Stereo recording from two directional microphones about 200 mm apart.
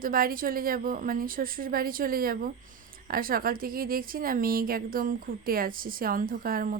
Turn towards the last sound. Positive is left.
turn(degrees=-45)  # may be behind; listen again after turning